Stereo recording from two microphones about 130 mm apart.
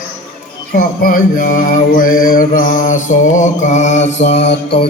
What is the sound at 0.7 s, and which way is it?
Mantra, 90° left.